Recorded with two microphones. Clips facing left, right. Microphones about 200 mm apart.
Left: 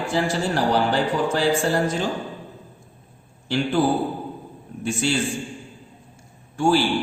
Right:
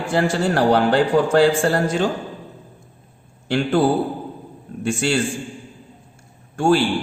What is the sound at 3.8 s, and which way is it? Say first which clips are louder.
Speech: right 2 dB; 65° right (ahead or behind).